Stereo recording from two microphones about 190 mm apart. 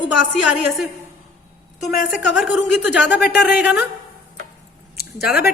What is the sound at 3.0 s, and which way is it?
Speech, 65° left (ahead or behind).